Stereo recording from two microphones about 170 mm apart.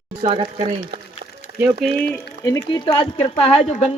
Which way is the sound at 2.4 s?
20° left (ahead or behind).